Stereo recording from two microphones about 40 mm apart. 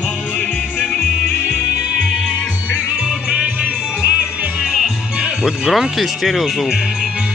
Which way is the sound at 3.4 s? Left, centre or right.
Right.